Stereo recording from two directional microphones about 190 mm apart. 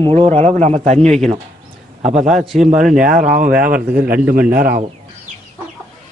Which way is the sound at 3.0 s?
45° right (ahead or behind).